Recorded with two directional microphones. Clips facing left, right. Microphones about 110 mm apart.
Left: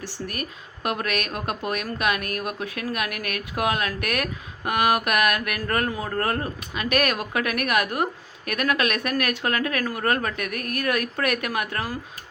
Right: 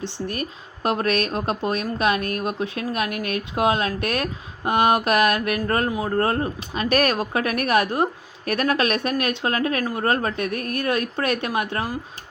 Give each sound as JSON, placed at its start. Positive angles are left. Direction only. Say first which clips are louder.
{"t": 0.0, "sound": "speech", "louder": "right 4 dB", "side_deg": -25}